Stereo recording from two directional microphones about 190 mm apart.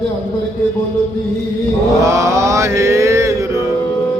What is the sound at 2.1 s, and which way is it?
Mantra, 15° right (ahead or behind).